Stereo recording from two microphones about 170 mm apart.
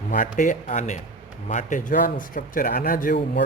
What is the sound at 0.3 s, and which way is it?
Speech, 50° left (ahead or behind).